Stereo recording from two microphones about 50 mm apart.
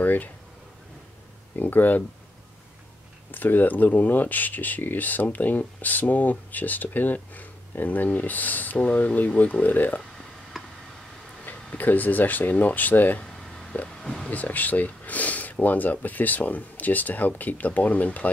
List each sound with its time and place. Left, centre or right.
0.0 s speech: left
1.6 s speech: left
3.3 s speech: left
8.7 s speech: left
10.5 s tick: centre
11.4 s speech: left
14.0 s a sound: centre
14.3 s speech: left